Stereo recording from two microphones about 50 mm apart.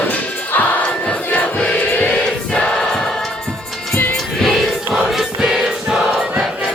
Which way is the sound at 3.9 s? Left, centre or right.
Left.